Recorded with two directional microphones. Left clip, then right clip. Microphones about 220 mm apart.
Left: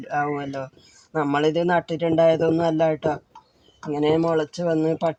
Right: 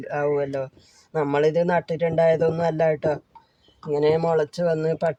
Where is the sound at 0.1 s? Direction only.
30° right (ahead or behind).